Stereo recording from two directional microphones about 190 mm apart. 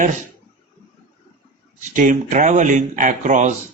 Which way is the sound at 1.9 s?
40° right (ahead or behind).